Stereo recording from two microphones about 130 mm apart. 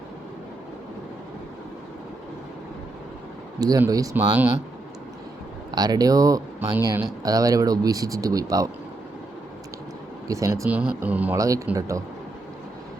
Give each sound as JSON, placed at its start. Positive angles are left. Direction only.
{"t": 3.6, "sound": "speech", "side_deg": -30}
{"t": 4.1, "sound": "speech", "side_deg": -15}
{"t": 5.7, "sound": "speech", "side_deg": -30}
{"t": 10.2, "sound": "speech", "side_deg": -25}
{"t": 10.7, "sound": "speech", "side_deg": -10}
{"t": 11.3, "sound": "speech", "side_deg": -25}